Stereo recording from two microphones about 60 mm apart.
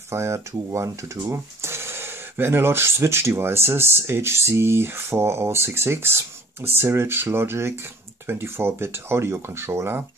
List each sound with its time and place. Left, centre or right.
0.1 s speech: right